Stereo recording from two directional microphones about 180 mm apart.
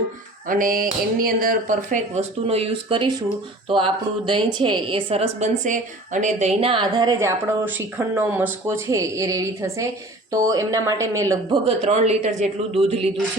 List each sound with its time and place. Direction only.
0.4 s a woman's voice: 50° right (ahead or behind); by 13.1 s 35° right (ahead or behind)